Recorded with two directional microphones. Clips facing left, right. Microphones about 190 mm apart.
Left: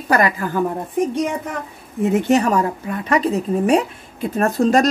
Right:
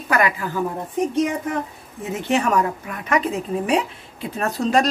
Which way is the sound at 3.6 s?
45° left (ahead or behind).